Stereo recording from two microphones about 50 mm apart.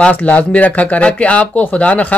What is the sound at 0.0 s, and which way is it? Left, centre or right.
Speech, left.